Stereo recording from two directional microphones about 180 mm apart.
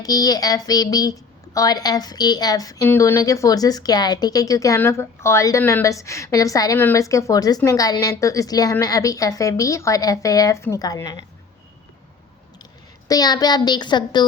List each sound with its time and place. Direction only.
0.0 s a woman's voice: 20° left (ahead or behind)
13.1 s a woman's voice: 20° left (ahead or behind)